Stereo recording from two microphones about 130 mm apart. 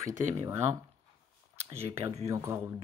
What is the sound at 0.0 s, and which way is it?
Speech, 20° right (ahead or behind).